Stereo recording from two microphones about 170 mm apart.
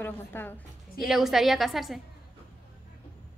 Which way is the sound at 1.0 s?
Centre (ahead or behind).